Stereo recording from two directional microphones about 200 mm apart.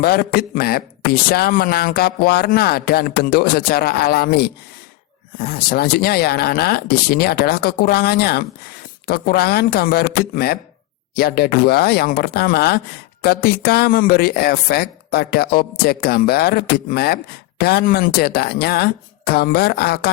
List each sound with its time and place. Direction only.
0.0 s speech: 50° left (ahead or behind)